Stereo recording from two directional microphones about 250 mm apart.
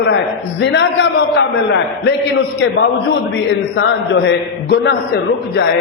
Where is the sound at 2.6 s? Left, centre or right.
Left.